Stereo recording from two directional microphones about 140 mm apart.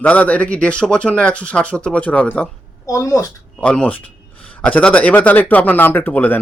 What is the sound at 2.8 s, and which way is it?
Speech, 20° left (ahead or behind).